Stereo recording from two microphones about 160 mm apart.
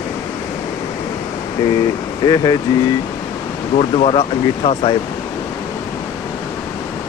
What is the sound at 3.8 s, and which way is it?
Speech, 40° left (ahead or behind).